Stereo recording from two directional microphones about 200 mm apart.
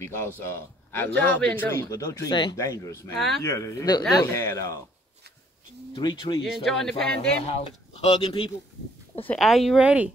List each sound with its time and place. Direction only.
0.4 s a man's voice: 10° left (ahead or behind)
5.9 s speech: 20° left (ahead or behind)
6.4 s a man's voice: centre (ahead or behind)
7.4 s speech: 30° left (ahead or behind)
9.3 s a man's voice: centre (ahead or behind)